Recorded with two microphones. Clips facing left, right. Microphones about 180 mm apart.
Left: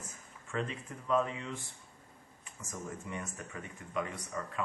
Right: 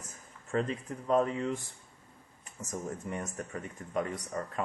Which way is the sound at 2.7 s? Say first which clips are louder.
Right 4 dB; 40° right (ahead or behind).